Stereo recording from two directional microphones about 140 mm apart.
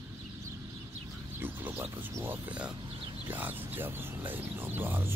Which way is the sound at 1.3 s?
15° right (ahead or behind).